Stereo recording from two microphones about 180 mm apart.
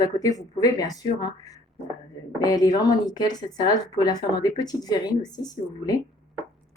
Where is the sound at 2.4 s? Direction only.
20° left (ahead or behind).